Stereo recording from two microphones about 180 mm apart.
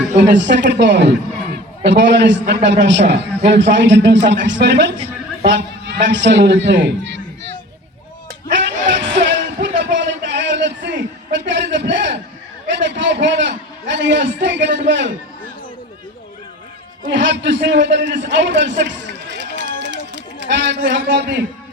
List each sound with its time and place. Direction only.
0.2 s a man's voice: 80° right
8.9 s music: 90° right
9.2 s a sound: 85° right
14.8 s a man's voice: 80° right
17.1 s a man's voice: 90° right
18.3 s run: 75° right (ahead or behind)
20.7 s speech: 75° right (ahead or behind)